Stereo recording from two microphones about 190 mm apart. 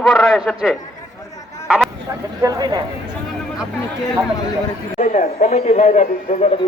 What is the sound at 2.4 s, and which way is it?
Speech, 20° right (ahead or behind).